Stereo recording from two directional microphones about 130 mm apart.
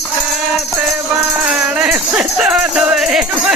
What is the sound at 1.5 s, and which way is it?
Music, 10° right (ahead or behind).